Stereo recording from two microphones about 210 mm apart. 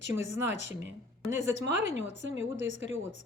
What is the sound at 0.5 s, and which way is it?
A woman's voice, 60° right (ahead or behind).